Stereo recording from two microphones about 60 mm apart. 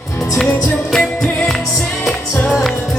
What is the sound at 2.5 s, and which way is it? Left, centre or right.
Music, centre.